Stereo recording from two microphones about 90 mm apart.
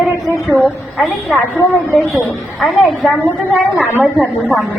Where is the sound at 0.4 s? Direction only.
Centre (ahead or behind).